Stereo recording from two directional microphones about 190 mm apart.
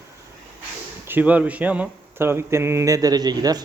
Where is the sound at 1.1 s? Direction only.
10° right (ahead or behind).